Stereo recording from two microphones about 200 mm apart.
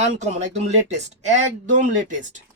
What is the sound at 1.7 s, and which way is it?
Speech, 40° right (ahead or behind).